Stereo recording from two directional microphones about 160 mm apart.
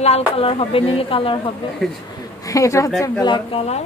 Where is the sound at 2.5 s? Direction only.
20° left (ahead or behind); by 3.8 s 40° left (ahead or behind).